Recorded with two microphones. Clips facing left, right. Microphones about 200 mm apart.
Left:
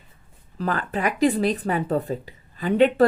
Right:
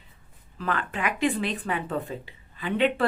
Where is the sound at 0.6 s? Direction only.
40° left (ahead or behind).